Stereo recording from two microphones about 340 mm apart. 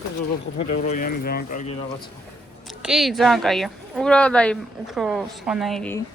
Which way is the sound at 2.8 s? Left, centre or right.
Centre.